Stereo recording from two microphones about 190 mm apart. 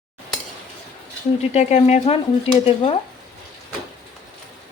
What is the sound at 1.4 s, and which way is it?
Speech, 35° left (ahead or behind).